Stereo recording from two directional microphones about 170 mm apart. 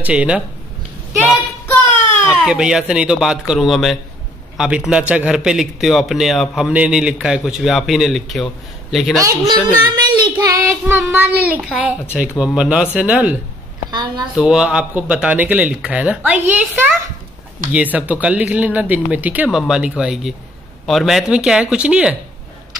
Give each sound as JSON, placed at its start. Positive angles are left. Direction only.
{"t": 0.0, "sound": "speech", "side_deg": -5}
{"t": 1.1, "sound": "child singing", "side_deg": 10}
{"t": 2.4, "sound": "a man's voice", "side_deg": -5}
{"t": 9.2, "sound": "speech", "side_deg": -20}
{"t": 9.9, "sound": "child singing", "side_deg": -25}
{"t": 10.3, "sound": "speech", "side_deg": -15}
{"t": 13.8, "sound": "a woman's voice", "side_deg": -25}
{"t": 14.3, "sound": "a man's voice", "side_deg": -5}